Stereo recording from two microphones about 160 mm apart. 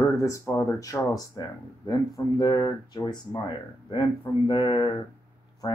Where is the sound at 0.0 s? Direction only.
15° left (ahead or behind).